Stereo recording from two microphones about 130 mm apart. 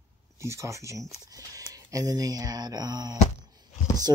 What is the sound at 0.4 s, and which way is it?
Speech, 20° right (ahead or behind).